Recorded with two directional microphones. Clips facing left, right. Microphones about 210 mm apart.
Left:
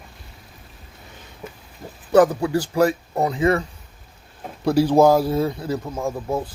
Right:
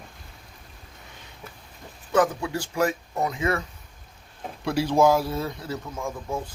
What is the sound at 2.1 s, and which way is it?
Speech, 35° left (ahead or behind).